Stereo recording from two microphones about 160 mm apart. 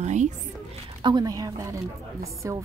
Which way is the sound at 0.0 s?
45° right (ahead or behind).